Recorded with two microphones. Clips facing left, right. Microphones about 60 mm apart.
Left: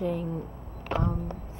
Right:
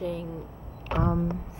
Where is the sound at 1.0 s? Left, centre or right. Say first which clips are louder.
Right 5 dB; right.